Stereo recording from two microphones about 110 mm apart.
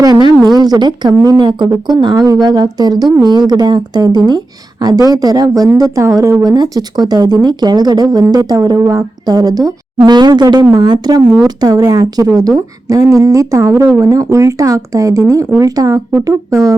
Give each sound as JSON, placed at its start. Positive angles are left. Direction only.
{"t": 0.0, "sound": "speech", "side_deg": -40}